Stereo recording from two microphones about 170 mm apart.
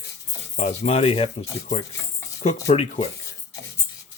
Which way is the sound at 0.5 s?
40° left (ahead or behind).